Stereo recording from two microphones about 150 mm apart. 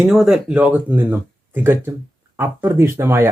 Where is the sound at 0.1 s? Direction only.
5° right (ahead or behind).